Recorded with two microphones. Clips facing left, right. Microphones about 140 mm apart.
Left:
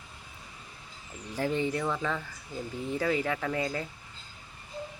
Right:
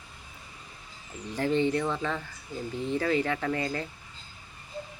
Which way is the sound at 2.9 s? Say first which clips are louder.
Right 2 dB; 10° left (ahead or behind).